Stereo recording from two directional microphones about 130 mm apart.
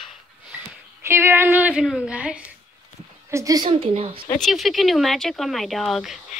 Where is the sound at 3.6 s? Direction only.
45° right (ahead or behind).